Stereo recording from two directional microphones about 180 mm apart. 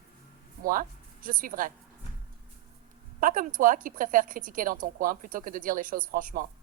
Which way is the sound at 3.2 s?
50° right (ahead or behind).